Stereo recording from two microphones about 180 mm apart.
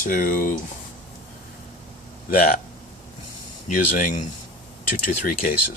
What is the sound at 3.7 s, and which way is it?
Speech, 45° left (ahead or behind).